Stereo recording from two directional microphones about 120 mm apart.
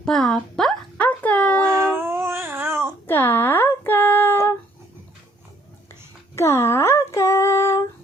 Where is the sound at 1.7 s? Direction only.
20° right (ahead or behind).